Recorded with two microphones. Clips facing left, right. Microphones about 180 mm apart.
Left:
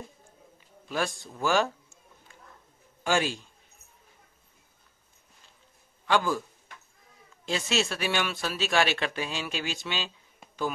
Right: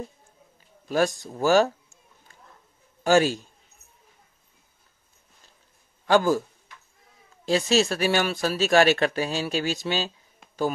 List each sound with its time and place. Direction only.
0.8 s speech: 40° right (ahead or behind)
3.0 s a man's voice: 40° right (ahead or behind)
6.0 s a man's voice: 40° right (ahead or behind)
7.4 s speech: 35° right (ahead or behind)